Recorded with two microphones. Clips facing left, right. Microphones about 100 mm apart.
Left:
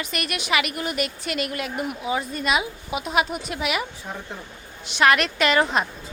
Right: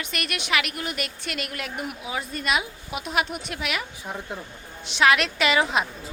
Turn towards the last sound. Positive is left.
turn(degrees=0)  # may be behind; listen again after turning